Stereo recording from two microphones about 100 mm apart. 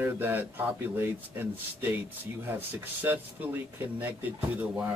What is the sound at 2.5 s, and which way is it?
A man's voice, 20° right (ahead or behind).